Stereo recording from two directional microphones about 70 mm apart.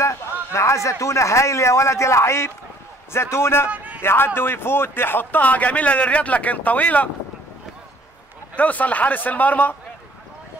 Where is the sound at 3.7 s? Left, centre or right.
Right.